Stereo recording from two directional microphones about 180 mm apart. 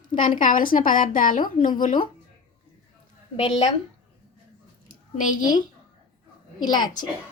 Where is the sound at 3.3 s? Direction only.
35° left (ahead or behind).